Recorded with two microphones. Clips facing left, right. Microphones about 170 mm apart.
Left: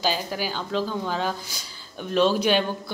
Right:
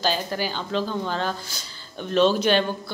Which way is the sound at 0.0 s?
5° left (ahead or behind).